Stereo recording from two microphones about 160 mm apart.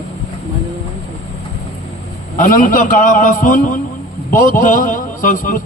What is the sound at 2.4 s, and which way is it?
A man's voice, 55° left (ahead or behind).